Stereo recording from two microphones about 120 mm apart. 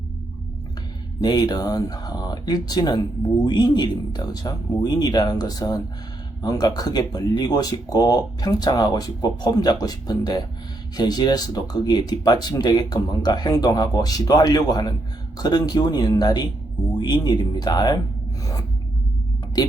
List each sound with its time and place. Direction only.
1.2 s speech: 35° left (ahead or behind)